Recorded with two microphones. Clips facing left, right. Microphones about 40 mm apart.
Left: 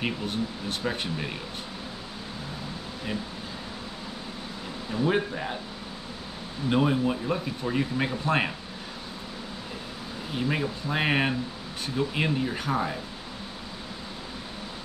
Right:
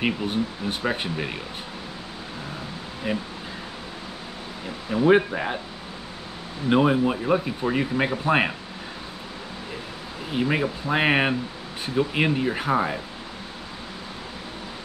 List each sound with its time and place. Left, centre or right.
0.0 s speech: right
3.1 s speech: right
4.9 s speech: right
6.7 s speech: right
10.3 s speech: right